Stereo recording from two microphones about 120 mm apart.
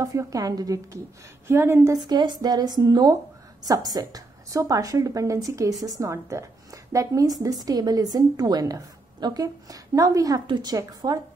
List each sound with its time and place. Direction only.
0.0 s a woman's voice: 25° right (ahead or behind)
1.5 s a woman's voice: 20° right (ahead or behind)
2.0 s a woman's voice: 35° right (ahead or behind)